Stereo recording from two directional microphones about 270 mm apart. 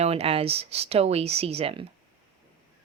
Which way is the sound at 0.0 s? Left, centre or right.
Right.